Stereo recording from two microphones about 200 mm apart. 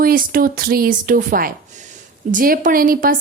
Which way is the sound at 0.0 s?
45° right (ahead or behind).